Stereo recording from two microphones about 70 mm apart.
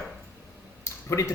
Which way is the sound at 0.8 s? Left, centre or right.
Left.